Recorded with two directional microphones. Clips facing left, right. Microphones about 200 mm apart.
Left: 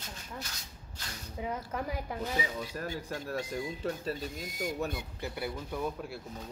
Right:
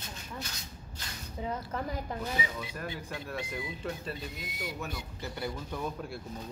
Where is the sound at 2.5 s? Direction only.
40° left (ahead or behind).